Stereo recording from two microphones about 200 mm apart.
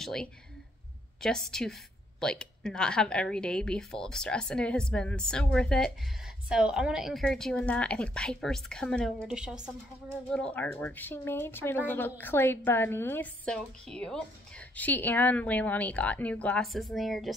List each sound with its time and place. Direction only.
0.0 s a woman's voice: 5° left (ahead or behind)